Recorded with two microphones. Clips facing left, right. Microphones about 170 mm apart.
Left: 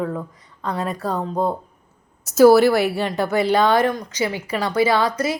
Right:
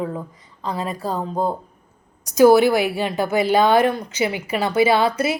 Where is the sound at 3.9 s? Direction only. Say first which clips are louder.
Right 1 dB; 25° right (ahead or behind).